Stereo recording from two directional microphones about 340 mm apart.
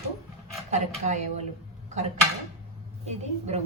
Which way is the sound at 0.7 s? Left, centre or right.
Centre.